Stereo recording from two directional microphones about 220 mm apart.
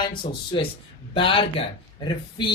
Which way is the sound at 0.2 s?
20° left (ahead or behind).